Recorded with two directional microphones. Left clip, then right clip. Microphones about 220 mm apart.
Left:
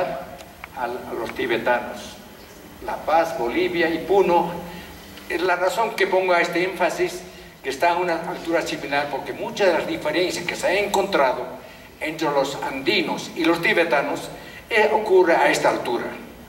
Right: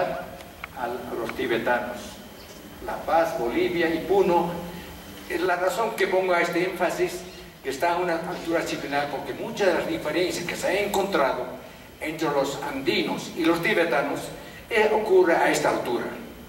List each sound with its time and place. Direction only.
0.7 s speech: 20° right (ahead or behind)
1.2 s speech: 10° right (ahead or behind)
3.4 s speech: 5° right (ahead or behind)
8.2 s speech: 20° right (ahead or behind)
8.5 s speech: 5° right (ahead or behind)